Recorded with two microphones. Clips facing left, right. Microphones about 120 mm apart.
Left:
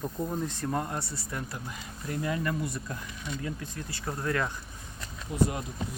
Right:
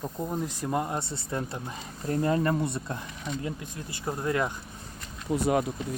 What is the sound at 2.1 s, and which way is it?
Speech, 35° right (ahead or behind).